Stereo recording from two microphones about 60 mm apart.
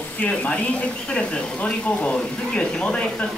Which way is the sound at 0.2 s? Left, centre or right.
Left.